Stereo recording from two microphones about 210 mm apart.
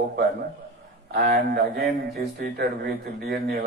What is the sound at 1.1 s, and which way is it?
A man's voice, 45° right (ahead or behind).